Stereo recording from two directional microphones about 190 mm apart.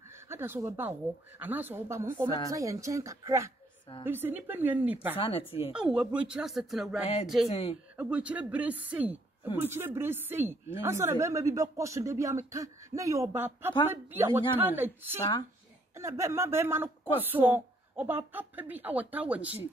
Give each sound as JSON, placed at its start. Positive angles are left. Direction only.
{"t": 0.3, "sound": "speech", "side_deg": -15}
{"t": 5.2, "sound": "speech", "side_deg": 30}
{"t": 5.7, "sound": "speech", "side_deg": -5}
{"t": 7.4, "sound": "speech", "side_deg": 30}
{"t": 8.0, "sound": "speech", "side_deg": -5}
{"t": 15.1, "sound": "speech", "side_deg": 20}
{"t": 16.0, "sound": "speech", "side_deg": -15}